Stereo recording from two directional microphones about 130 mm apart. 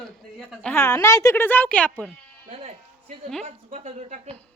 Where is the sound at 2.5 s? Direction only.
50° right (ahead or behind).